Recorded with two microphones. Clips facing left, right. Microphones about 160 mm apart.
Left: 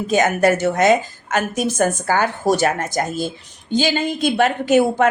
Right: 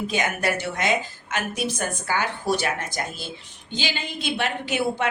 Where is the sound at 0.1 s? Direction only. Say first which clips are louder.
Left 13 dB; 45° left (ahead or behind).